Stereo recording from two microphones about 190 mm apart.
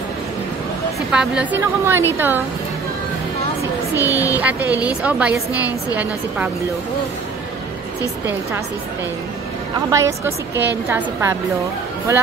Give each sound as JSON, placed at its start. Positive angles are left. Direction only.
{"t": 1.1, "sound": "a woman's voice", "side_deg": -5}
{"t": 3.9, "sound": "a woman's voice", "side_deg": -10}
{"t": 9.8, "sound": "a woman's voice", "side_deg": -15}